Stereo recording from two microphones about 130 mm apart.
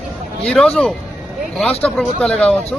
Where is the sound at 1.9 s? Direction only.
5° left (ahead or behind).